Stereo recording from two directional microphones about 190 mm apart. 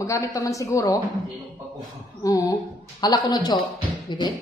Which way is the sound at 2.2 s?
20° left (ahead or behind).